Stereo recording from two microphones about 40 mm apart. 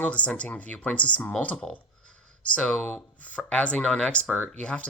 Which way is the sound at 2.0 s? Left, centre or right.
Left.